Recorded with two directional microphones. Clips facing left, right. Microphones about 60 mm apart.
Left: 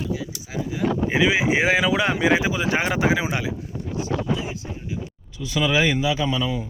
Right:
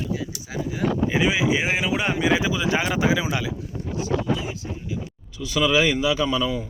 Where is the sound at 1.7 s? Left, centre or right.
Left.